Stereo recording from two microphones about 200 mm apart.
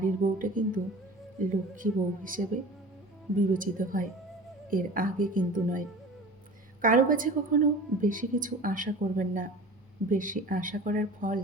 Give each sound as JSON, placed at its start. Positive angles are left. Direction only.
{"t": 0.0, "sound": "a woman's voice", "side_deg": -40}
{"t": 6.8, "sound": "a woman's voice", "side_deg": -40}